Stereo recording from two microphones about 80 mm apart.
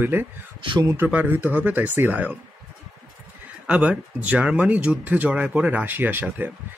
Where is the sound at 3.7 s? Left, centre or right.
Centre.